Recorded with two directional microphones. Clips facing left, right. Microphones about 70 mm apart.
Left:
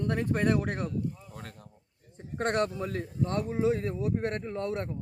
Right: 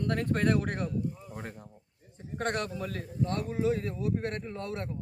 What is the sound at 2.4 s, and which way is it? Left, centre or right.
Speech, left.